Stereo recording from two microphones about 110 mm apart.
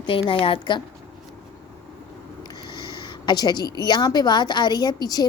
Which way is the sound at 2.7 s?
40° left (ahead or behind).